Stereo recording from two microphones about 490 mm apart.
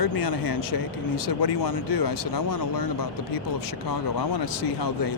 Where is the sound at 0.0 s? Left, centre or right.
Left.